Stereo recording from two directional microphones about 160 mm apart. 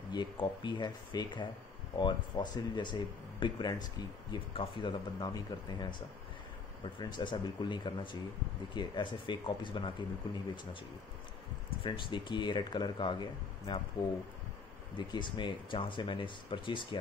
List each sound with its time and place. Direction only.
0.1 s speech: 30° left (ahead or behind)
11.8 s speech: 30° left (ahead or behind)
15.0 s speech: 30° left (ahead or behind)